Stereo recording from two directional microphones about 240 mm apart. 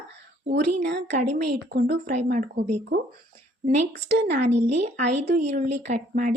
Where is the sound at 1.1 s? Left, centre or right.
Right.